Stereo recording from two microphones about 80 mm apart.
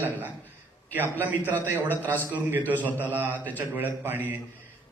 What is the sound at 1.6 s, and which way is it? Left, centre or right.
Speech, right.